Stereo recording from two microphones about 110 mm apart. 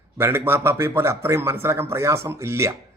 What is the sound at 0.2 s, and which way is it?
A man's voice, 20° right (ahead or behind).